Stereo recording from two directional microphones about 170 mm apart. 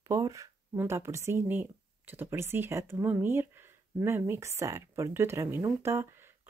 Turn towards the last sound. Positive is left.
turn(degrees=-15)  # may be behind; listen again after turning